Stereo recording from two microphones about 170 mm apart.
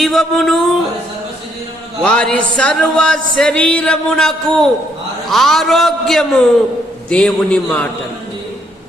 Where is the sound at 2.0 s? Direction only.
5° left (ahead or behind).